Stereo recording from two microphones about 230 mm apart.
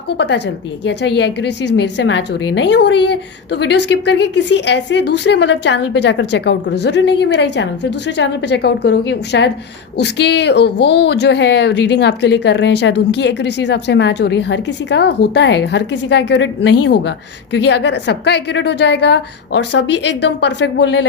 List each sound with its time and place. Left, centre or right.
0.2 s a woman's voice: left